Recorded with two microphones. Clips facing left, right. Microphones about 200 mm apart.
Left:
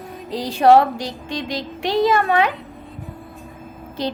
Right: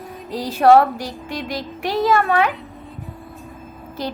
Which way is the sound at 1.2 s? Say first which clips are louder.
Even; 5° right (ahead or behind).